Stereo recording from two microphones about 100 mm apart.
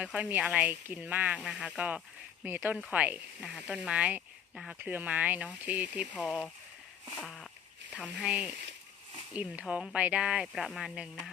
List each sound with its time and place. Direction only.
0.0 s speech: 15° right (ahead or behind)
4.8 s speech: 15° right (ahead or behind)
8.0 s speech: 10° right (ahead or behind)